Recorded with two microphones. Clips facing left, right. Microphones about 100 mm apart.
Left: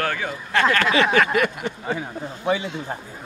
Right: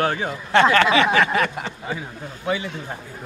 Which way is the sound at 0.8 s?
20° right (ahead or behind).